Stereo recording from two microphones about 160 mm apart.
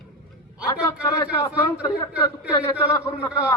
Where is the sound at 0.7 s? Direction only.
20° left (ahead or behind).